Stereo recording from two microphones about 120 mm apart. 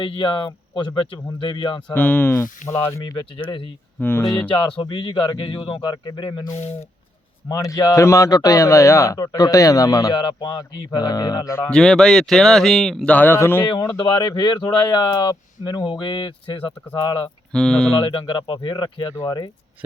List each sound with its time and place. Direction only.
0.0 s speech: 40° left (ahead or behind)
1.9 s speech: 15° left (ahead or behind)
4.2 s speech: 30° left (ahead or behind)
4.9 s speech: 40° left (ahead or behind)
7.4 s a man's voice: 30° left (ahead or behind)
11.7 s speech: 5° left (ahead or behind)
13.7 s speech: 40° left (ahead or behind)
17.5 s speech: 5° left (ahead or behind)
18.0 s speech: 40° left (ahead or behind)
19.1 s speech: 30° left (ahead or behind)